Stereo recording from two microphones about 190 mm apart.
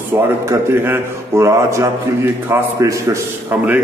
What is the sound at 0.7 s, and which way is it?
A man's voice, 10° right (ahead or behind).